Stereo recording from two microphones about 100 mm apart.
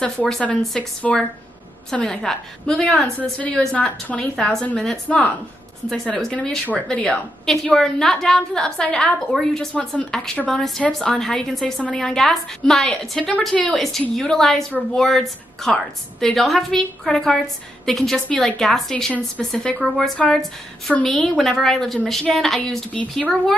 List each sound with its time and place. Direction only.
0.3 s a woman's voice: 5° left (ahead or behind)